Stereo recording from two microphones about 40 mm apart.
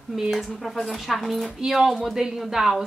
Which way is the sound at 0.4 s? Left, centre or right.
Centre.